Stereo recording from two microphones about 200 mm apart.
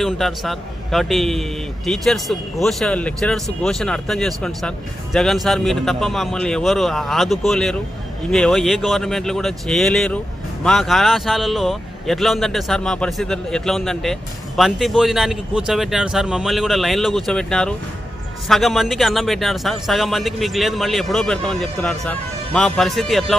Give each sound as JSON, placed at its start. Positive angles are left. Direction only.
{"t": 0.0, "sound": "speech", "side_deg": 0}